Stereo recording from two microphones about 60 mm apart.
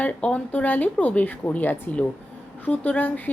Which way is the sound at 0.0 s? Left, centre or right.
Centre.